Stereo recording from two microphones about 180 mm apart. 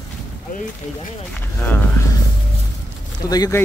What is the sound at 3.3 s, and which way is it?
Speech, 20° left (ahead or behind).